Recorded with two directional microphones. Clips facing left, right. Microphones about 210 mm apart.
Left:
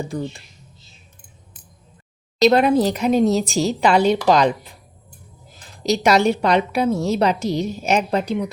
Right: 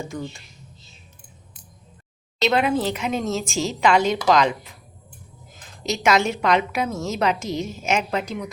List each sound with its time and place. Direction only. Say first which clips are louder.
0.0 s a woman's voice: left 4 dB; 35° left (ahead or behind)
2.4 s a woman's voice: left 6 dB; 40° left (ahead or behind)
5.8 s a woman's voice: left 4 dB; 35° left (ahead or behind)